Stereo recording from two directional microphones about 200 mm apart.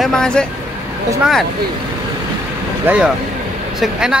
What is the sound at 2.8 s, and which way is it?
Speech, 5° right (ahead or behind).